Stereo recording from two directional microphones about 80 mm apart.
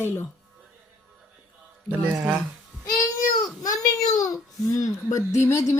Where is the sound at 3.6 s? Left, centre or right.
Left.